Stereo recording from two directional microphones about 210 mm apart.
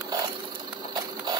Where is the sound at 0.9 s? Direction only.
20° right (ahead or behind).